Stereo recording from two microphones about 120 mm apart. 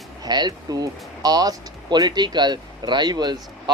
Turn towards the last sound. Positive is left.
turn(degrees=-35)  # may be behind; listen again after turning